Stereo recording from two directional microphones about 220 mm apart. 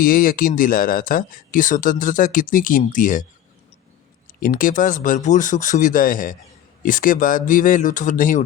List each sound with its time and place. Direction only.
0.0 s speech: 40° left (ahead or behind)
4.4 s speech: 40° left (ahead or behind)